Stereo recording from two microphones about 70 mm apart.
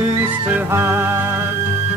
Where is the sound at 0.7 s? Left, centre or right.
Right.